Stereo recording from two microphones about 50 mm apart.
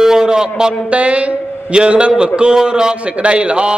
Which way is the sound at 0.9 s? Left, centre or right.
Right.